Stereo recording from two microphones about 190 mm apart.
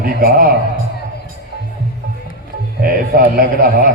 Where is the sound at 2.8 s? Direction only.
50° right (ahead or behind).